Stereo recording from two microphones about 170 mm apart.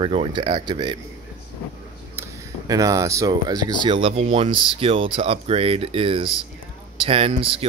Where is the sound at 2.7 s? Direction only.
20° right (ahead or behind).